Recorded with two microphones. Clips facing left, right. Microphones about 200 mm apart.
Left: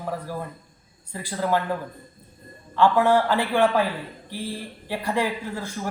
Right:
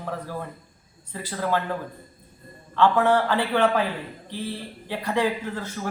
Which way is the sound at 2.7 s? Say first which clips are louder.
Left 1 dB; 10° left (ahead or behind).